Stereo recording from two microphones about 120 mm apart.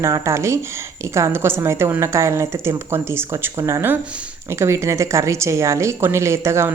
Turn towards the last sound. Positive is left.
turn(degrees=-25)  # may be behind; listen again after turning